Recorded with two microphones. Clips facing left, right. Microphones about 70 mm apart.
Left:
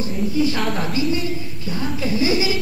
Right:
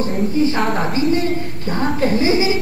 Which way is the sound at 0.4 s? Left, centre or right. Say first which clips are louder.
Right 3 dB; right.